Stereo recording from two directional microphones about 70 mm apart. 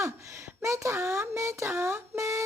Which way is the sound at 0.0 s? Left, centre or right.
Right.